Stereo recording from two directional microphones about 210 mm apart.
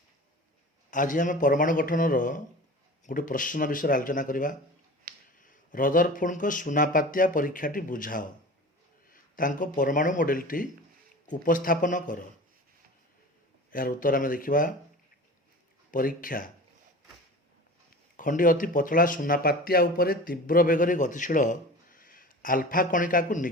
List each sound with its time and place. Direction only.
0.9 s speech: 40° left (ahead or behind)
5.1 s a sound: 45° right (ahead or behind)
5.4 s speech: 40° left (ahead or behind)
13.7 s speech: 40° left (ahead or behind)
15.9 s speech: 40° left (ahead or behind)
18.2 s speech: 40° left (ahead or behind)